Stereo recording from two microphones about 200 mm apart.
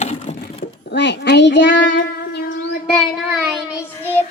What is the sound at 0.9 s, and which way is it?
A child's voice, 60° left (ahead or behind).